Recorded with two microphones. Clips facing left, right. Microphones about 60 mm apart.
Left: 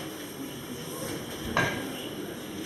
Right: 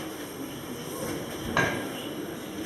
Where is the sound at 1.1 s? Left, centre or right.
Centre.